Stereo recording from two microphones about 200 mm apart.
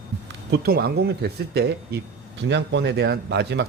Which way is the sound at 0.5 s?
50° right (ahead or behind).